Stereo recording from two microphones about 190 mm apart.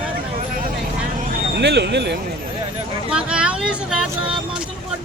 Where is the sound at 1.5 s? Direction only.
65° right (ahead or behind).